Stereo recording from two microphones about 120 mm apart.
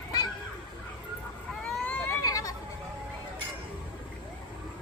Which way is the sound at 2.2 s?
30° left (ahead or behind).